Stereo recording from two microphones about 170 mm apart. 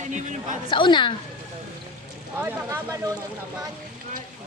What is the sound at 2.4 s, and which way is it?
Speech, 15° right (ahead or behind).